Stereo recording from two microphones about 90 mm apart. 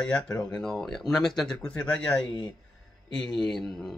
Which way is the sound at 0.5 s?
5° left (ahead or behind).